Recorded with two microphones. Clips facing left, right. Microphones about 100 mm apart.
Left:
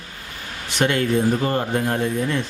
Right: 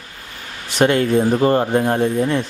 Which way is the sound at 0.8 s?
35° right (ahead or behind).